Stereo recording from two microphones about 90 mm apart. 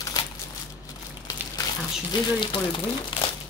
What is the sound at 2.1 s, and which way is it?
Speech, 65° left (ahead or behind).